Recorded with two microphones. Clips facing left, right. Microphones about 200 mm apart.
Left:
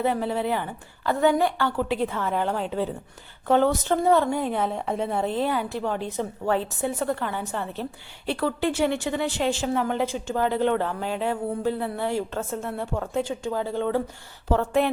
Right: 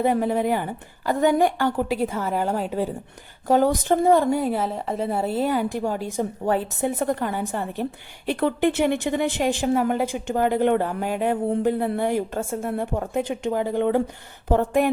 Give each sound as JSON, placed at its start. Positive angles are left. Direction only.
{"t": 0.0, "sound": "speech", "side_deg": -45}
{"t": 0.4, "sound": "a woman's voice", "side_deg": -15}
{"t": 13.1, "sound": "speech", "side_deg": -60}
{"t": 13.4, "sound": "a woman's voice", "side_deg": -15}